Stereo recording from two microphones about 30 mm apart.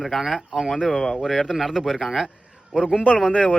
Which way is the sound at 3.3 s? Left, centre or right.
Left.